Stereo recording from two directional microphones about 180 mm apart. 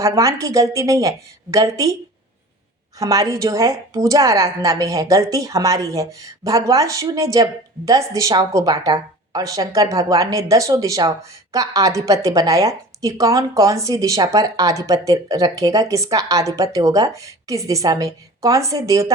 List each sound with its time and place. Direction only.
0.0 s a woman's voice: 15° right (ahead or behind)
3.0 s a woman's voice: 20° right (ahead or behind)